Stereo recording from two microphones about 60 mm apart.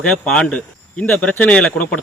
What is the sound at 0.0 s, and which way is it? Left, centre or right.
Speech, centre.